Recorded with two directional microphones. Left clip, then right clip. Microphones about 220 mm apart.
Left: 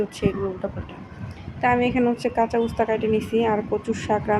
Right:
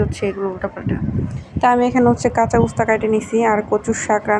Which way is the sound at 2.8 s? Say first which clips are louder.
Right 5 dB; 5° right (ahead or behind).